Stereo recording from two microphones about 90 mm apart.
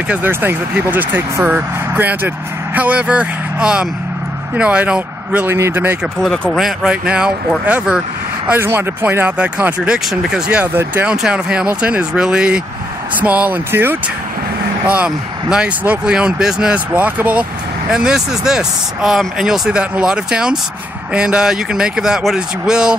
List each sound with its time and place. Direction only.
0.1 s speech: 20° right (ahead or behind)
5.5 s speech: 25° right (ahead or behind)
6.2 s speech: 5° left (ahead or behind); by 8.0 s 15° right (ahead or behind)
8.5 s speech: 25° right (ahead or behind)
10.6 s speech: 25° right (ahead or behind)
11.1 s speech: 10° right (ahead or behind)